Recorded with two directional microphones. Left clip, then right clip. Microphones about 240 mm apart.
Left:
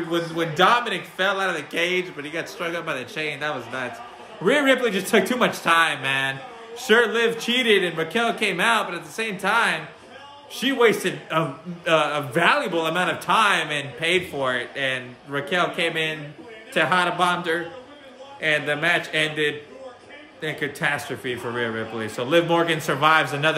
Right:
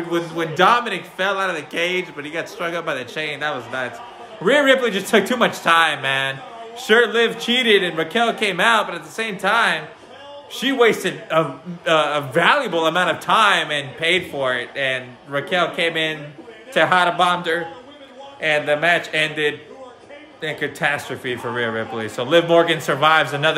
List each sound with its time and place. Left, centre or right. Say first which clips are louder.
0.1 s a man's voice: right 2 dB; centre